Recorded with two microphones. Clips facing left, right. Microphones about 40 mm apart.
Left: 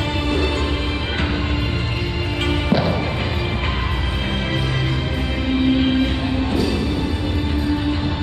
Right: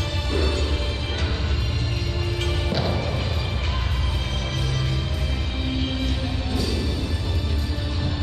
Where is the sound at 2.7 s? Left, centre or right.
Centre.